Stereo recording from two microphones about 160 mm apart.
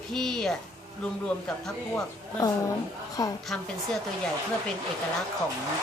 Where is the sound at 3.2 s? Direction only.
25° left (ahead or behind).